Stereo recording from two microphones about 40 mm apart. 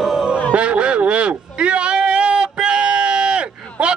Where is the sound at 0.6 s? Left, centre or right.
Right.